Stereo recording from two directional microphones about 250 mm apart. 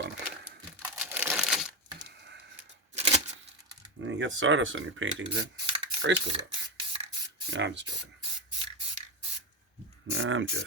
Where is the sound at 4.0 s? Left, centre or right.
Right.